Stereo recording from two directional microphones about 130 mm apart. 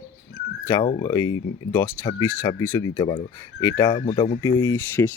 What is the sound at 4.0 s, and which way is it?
Speech, 45° left (ahead or behind).